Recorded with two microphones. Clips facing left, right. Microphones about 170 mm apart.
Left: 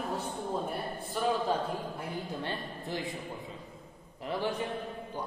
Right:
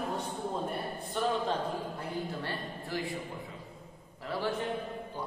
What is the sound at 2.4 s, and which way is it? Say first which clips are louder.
Speech: left 1 dB; 20° left (ahead or behind).